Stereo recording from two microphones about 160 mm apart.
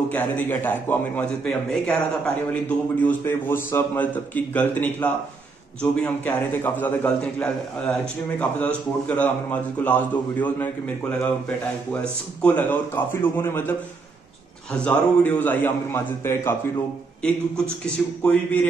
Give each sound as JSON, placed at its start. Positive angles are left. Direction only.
{"t": 0.1, "sound": "a man's voice", "side_deg": 10}